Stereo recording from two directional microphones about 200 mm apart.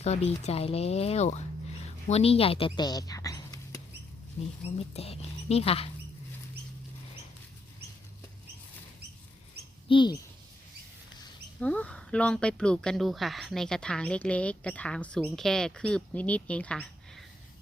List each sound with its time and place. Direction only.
0.0 s speech: 30° left (ahead or behind)
4.9 s speech: 30° left (ahead or behind)
9.9 s speech: 25° left (ahead or behind)
11.6 s speech: 5° left (ahead or behind)